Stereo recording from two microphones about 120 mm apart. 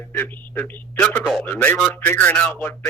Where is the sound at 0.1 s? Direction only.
15° left (ahead or behind).